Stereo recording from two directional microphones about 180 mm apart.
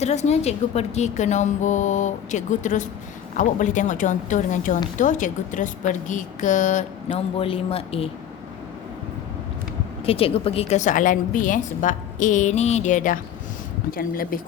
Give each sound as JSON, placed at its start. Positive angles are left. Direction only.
{"t": 0.0, "sound": "a woman's voice", "side_deg": 40}
{"t": 10.1, "sound": "speech", "side_deg": 30}